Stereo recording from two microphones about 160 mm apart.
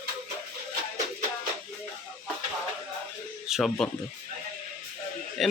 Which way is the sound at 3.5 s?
Centre (ahead or behind).